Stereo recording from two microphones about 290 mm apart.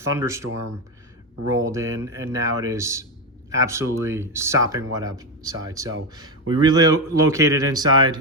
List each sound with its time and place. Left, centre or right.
0.0 s speech: centre